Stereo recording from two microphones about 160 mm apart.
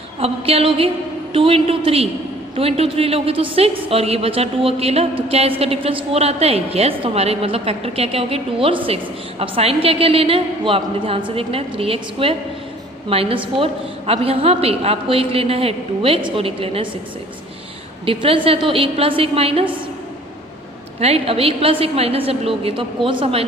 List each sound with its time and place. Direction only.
0.2 s a woman's voice: 40° right (ahead or behind)
18.0 s a woman's voice: 35° right (ahead or behind)
21.0 s a woman's voice: 40° right (ahead or behind)